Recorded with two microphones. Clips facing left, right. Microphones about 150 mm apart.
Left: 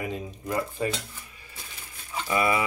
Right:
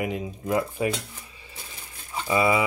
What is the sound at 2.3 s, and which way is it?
Speech, 25° right (ahead or behind).